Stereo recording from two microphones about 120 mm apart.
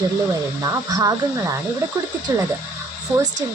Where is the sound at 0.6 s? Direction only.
30° right (ahead or behind).